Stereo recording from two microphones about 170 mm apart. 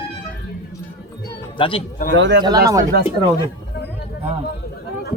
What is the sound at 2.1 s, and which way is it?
Speech, 90° right.